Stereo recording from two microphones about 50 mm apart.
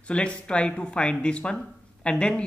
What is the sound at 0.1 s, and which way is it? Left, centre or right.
Speech, left.